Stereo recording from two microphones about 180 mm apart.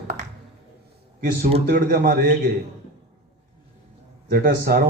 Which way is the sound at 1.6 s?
55° right (ahead or behind).